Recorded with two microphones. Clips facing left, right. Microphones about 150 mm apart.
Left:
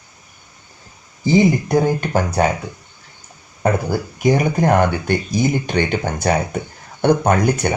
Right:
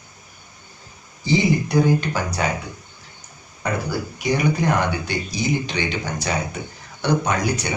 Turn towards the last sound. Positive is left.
turn(degrees=55)  # may be behind; listen again after turning